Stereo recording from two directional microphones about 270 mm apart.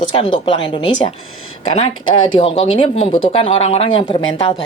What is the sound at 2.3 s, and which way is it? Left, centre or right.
Speech, centre.